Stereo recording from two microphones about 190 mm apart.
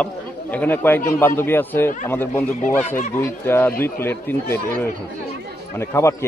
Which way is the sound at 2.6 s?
45° left (ahead or behind).